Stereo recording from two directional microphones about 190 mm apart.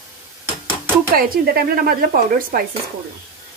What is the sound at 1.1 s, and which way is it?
Speech, 50° right (ahead or behind).